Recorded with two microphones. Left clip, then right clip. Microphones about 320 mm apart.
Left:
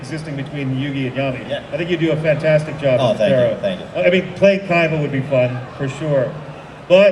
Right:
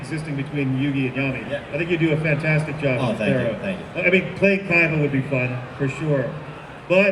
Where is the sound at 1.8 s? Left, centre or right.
Left.